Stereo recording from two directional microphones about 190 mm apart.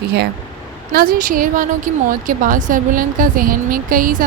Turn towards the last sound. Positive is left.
turn(degrees=-45)  # may be behind; listen again after turning